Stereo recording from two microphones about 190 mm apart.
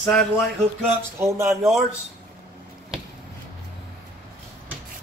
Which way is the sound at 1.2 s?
15° right (ahead or behind).